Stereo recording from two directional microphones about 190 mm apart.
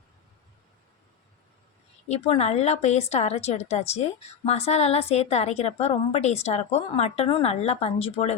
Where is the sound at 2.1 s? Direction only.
30° left (ahead or behind).